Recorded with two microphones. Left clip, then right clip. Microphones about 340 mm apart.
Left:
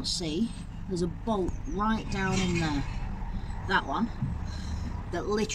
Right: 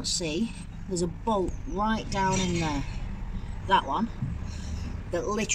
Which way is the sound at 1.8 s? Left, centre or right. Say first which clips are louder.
Right 3 dB; centre.